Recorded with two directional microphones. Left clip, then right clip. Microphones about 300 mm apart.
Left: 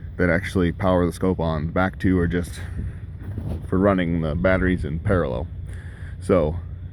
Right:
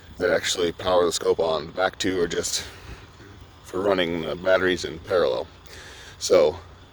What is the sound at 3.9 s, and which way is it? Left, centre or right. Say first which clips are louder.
Speech: right 1 dB; right.